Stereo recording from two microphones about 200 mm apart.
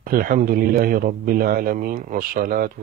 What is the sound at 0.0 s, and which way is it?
A man's voice, 45° right (ahead or behind).